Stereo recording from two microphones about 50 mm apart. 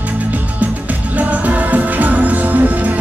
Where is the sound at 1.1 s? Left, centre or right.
Right.